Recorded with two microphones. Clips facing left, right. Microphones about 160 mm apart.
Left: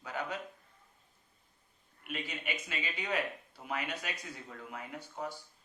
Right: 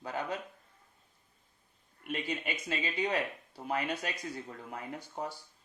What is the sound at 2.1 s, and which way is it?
Speech, 35° right (ahead or behind).